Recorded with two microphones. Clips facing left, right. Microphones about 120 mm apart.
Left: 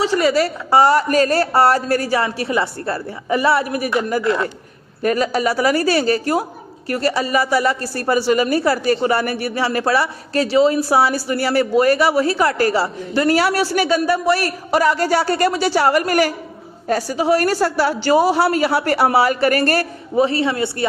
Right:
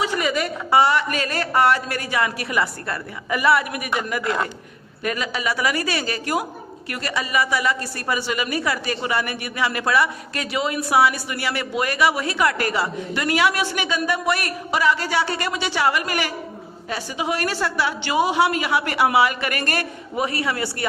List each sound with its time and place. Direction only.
0.0 s a woman's voice: 30° left (ahead or behind)